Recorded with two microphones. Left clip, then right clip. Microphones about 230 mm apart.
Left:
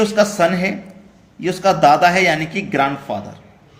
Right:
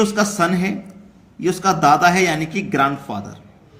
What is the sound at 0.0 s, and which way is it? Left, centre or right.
Speech, right.